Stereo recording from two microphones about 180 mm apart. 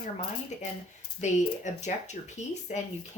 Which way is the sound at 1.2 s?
40° left (ahead or behind).